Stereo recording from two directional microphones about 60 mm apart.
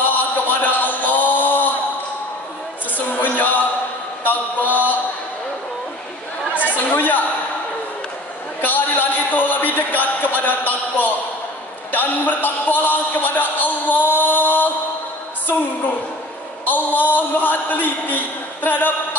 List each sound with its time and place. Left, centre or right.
0.0 s a sound: left
2.9 s music: left
4.2 s mantra: left
6.6 s speech: left
8.5 s a man's voice: left
16.6 s a man's voice: left